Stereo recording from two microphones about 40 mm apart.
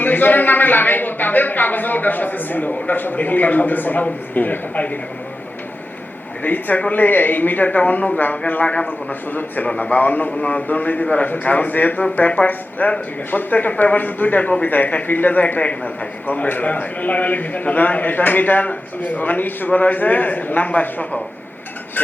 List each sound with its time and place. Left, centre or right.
0.0 s a man's voice: left
6.4 s a man's voice: left
8.7 s a man's voice: left
9.7 s a man's voice: left
22.0 s a sound: left